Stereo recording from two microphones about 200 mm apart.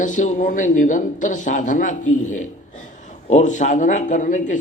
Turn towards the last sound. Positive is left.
turn(degrees=40)  # may be behind; listen again after turning